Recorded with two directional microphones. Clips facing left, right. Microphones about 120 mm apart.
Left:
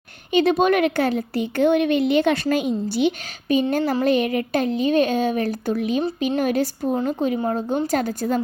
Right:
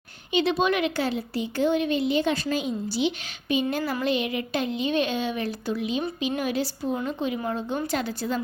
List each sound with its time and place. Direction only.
0.3 s speech: 50° left (ahead or behind)
6.9 s speech: 35° left (ahead or behind)